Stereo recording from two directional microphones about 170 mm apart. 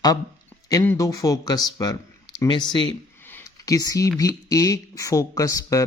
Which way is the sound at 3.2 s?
15° left (ahead or behind).